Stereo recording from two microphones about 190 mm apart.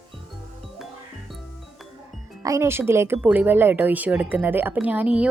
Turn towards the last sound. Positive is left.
turn(degrees=-5)  # may be behind; listen again after turning